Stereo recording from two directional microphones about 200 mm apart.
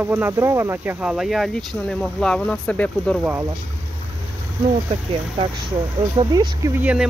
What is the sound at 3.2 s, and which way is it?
Speech, 10° right (ahead or behind).